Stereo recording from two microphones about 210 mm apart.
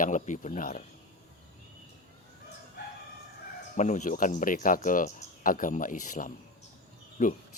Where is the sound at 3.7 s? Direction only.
35° left (ahead or behind).